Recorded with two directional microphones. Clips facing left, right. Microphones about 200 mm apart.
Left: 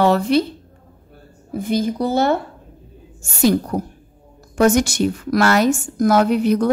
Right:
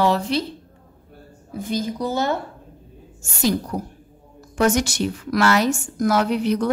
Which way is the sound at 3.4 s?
55° left (ahead or behind).